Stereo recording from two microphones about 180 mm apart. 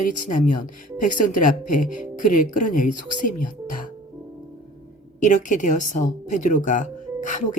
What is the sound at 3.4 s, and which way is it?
Music, 45° left (ahead or behind).